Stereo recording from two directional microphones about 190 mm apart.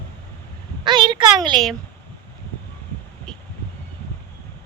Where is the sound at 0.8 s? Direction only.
25° right (ahead or behind).